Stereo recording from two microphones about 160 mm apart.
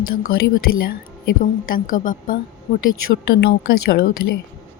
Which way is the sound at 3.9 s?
75° left (ahead or behind).